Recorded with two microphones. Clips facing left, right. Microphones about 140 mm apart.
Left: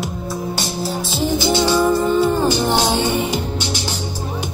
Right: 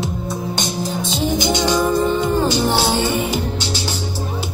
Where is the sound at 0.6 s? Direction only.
20° right (ahead or behind).